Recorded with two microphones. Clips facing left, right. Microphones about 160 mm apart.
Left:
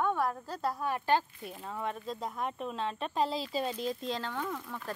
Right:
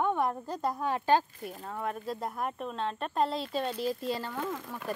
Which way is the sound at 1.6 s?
Centre (ahead or behind).